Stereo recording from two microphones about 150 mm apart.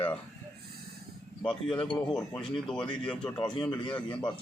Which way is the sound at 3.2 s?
30° left (ahead or behind).